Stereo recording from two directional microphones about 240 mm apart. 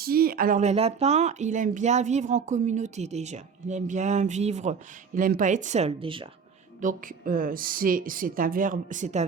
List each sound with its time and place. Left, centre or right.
0.0 s speech: right
6.8 s speech: right